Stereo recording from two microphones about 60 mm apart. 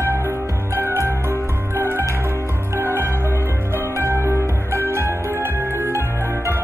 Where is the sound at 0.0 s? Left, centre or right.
Right.